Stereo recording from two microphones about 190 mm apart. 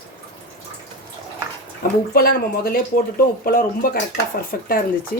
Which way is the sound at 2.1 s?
50° left (ahead or behind).